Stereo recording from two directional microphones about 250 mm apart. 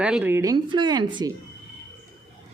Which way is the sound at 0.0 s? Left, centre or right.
Centre.